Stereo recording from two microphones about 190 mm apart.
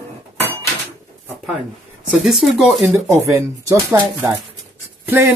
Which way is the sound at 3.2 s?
15° right (ahead or behind).